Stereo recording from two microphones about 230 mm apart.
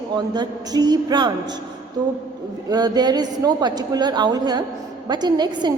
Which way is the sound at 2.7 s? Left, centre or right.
Centre.